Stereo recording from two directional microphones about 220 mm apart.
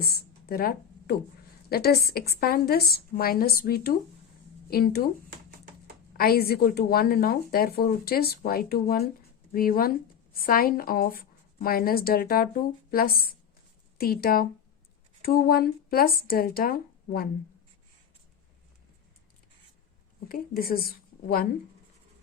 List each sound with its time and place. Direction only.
0.0 s a sound: 45° left (ahead or behind)
1.7 s a woman's voice: 45° left (ahead or behind)
6.1 s a woman's voice: 45° left (ahead or behind)
20.2 s speech: 40° left (ahead or behind)